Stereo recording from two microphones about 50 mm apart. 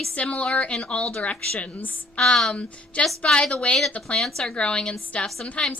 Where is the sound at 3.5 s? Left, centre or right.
Left.